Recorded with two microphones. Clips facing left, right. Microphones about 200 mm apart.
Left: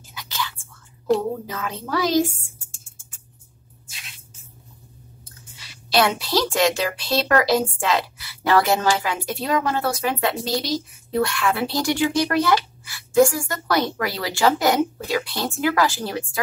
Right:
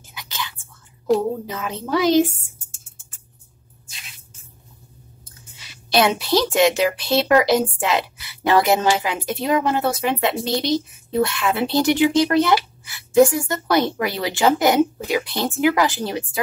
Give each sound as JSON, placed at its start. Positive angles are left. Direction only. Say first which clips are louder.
{"t": 0.1, "sound": "whispering", "louder": "left 2 dB", "side_deg": -20}
{"t": 1.5, "sound": "a woman's voice", "louder": "right 3 dB", "side_deg": -20}
{"t": 3.9, "sound": "music", "louder": "even", "side_deg": 0}
{"t": 5.9, "sound": "a woman's voice", "louder": "right 3 dB", "side_deg": -20}